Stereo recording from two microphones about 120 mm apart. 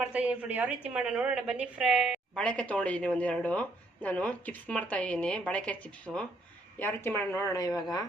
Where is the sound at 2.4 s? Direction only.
10° left (ahead or behind); by 7.7 s 25° left (ahead or behind).